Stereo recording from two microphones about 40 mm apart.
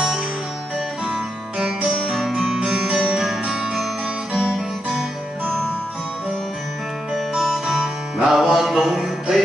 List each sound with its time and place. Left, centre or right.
2.1 s music: centre
7.3 s music: centre
8.5 s a sound: centre